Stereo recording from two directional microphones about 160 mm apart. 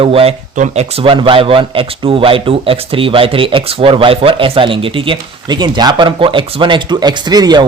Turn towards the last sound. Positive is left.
turn(degrees=-25)  # may be behind; listen again after turning